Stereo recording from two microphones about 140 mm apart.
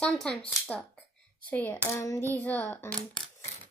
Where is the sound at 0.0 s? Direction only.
5° left (ahead or behind).